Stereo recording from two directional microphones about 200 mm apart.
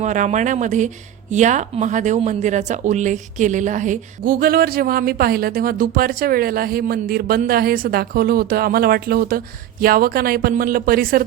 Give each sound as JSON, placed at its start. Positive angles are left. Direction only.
{"t": 0.0, "sound": "speech", "side_deg": -35}